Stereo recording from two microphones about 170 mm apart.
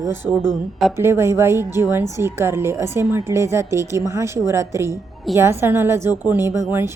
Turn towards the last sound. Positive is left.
turn(degrees=-15)  # may be behind; listen again after turning